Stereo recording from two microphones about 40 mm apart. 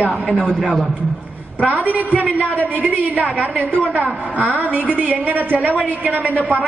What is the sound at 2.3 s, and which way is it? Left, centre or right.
Speech, left.